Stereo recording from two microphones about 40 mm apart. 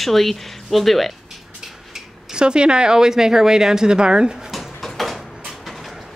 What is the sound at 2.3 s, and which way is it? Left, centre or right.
A woman's voice, right.